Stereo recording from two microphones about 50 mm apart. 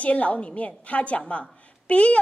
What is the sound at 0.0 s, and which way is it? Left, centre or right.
A woman's voice, left.